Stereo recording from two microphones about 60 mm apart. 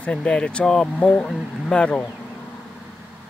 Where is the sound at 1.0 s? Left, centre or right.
Centre.